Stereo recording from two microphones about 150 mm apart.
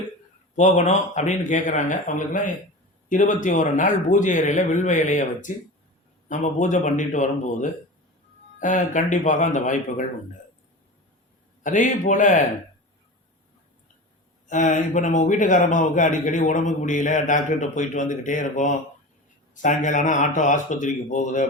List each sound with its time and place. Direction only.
0.5 s a man's voice: 55° left (ahead or behind)
11.6 s a man's voice: 60° left (ahead or behind)
14.4 s a man's voice: 55° left (ahead or behind)